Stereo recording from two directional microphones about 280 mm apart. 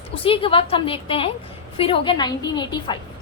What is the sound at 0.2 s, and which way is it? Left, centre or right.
A woman's voice, centre.